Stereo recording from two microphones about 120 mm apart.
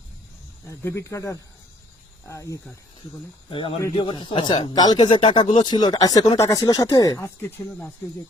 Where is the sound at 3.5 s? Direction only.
45° left (ahead or behind); by 7.3 s 30° left (ahead or behind).